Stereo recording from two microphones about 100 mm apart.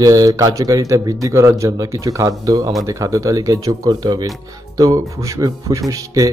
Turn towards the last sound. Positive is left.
turn(degrees=-35)  # may be behind; listen again after turning